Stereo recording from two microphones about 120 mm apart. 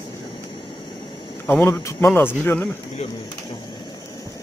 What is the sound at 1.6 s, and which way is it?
Speech, 20° left (ahead or behind).